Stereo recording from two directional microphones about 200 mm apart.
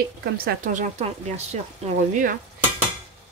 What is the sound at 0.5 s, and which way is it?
Speech, 40° right (ahead or behind).